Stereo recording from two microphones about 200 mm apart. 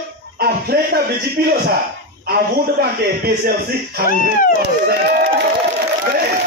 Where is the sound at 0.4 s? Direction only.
50° right (ahead or behind).